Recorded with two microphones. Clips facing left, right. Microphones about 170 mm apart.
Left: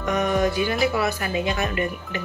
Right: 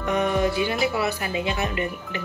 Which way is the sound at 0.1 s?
25° right (ahead or behind).